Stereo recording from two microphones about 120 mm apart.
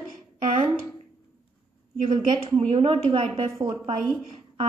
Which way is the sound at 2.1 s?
50° right (ahead or behind).